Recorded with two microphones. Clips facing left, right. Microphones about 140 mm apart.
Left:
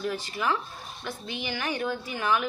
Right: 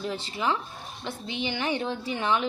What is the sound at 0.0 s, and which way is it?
A woman's voice, 25° right (ahead or behind).